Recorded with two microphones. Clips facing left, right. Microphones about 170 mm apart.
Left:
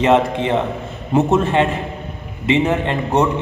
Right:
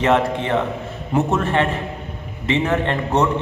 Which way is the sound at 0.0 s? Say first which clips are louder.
Left 3 dB; 20° left (ahead or behind).